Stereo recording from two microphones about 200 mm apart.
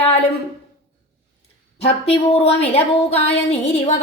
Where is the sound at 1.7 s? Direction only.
30° left (ahead or behind).